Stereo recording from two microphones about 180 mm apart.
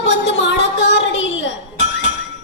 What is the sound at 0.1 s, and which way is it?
Music, 80° left.